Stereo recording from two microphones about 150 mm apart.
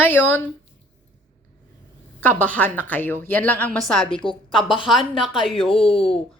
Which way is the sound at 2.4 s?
10° left (ahead or behind).